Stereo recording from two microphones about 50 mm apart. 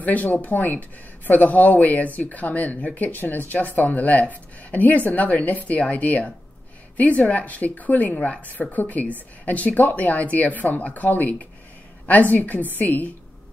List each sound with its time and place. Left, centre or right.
0.0 s a woman's voice: left